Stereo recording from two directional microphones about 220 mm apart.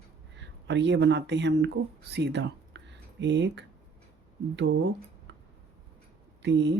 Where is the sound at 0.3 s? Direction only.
55° right (ahead or behind).